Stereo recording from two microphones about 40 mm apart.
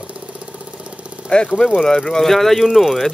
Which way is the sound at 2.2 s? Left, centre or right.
Centre.